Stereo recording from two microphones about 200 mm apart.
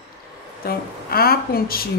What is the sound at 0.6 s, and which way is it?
A woman's voice, 50° left (ahead or behind).